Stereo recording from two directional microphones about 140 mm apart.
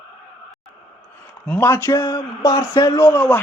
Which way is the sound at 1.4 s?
15° left (ahead or behind).